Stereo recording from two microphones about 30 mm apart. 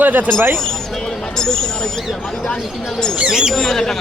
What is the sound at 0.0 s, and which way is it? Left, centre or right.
Speech, right.